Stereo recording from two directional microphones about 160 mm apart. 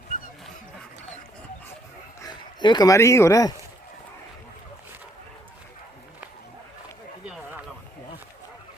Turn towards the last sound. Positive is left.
turn(degrees=-5)  # may be behind; listen again after turning